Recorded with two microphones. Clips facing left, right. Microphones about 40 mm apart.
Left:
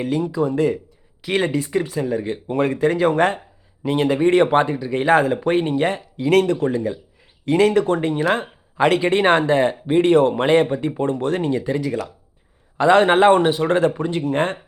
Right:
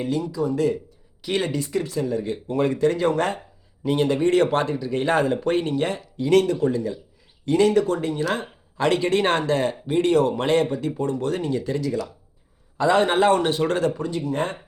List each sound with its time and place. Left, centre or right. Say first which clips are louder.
0.0 s speech: left 4 dB; left
12.7 s speech: left 5 dB; left
13.4 s speech: left 4 dB; centre
13.7 s speech: left 5 dB; left
14.1 s speech: left 5 dB; left